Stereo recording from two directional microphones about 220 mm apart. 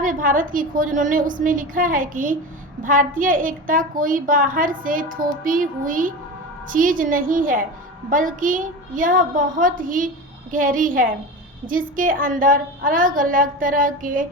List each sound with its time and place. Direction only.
0.0 s a woman's voice: 35° right (ahead or behind)